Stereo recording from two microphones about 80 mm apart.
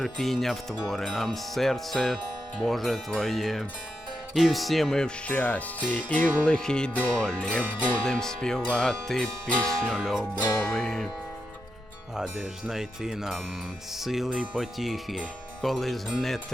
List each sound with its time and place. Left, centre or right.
0.0 s speech: centre
5.3 s speech: centre
6.4 s music: centre
8.6 s speech: centre
12.1 s speech: centre